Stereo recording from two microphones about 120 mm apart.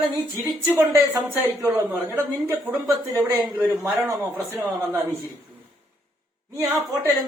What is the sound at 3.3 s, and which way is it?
Speech, 35° right (ahead or behind).